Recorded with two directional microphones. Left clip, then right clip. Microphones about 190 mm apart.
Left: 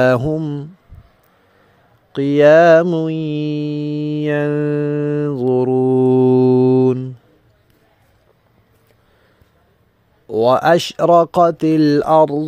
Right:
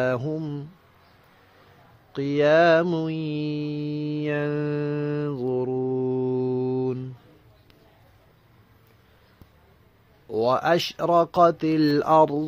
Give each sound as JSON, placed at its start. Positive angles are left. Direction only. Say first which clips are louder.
{"t": 0.0, "sound": "speech", "louder": "left 11 dB", "side_deg": 50}
{"t": 2.1, "sound": "mantra", "louder": "left 10 dB", "side_deg": 45}
{"t": 10.2, "sound": "speech", "louder": "left 9 dB", "side_deg": 45}
{"t": 12.0, "sound": "speech", "louder": "left 3 dB", "side_deg": 25}